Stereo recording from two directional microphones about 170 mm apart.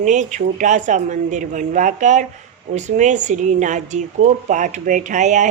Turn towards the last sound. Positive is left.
turn(degrees=-45)  # may be behind; listen again after turning